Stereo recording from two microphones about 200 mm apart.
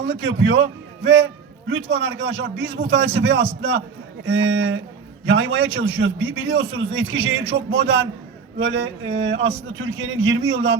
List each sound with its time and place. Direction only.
0.0 s a man's voice: 65° right (ahead or behind)